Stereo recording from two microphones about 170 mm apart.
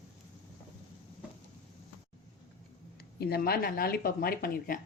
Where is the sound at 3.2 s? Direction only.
65° left (ahead or behind).